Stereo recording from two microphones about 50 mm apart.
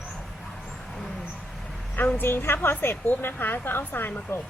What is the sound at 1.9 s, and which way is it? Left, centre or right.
Speech, left.